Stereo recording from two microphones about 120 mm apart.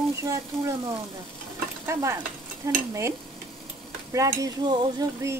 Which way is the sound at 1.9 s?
25° right (ahead or behind).